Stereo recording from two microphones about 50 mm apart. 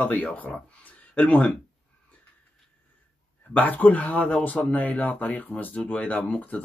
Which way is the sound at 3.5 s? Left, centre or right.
Left.